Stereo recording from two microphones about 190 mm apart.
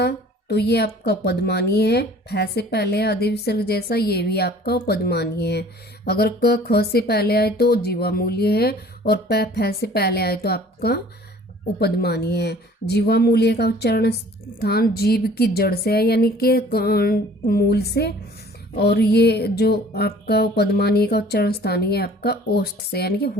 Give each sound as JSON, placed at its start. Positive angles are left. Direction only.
{"t": 0.0, "sound": "speech", "side_deg": 60}